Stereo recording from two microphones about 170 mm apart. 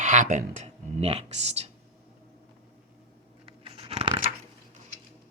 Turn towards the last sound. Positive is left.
turn(degrees=-35)  # may be behind; listen again after turning